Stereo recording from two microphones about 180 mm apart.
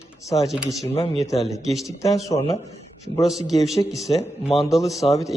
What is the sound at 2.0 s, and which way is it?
Speech, 20° left (ahead or behind).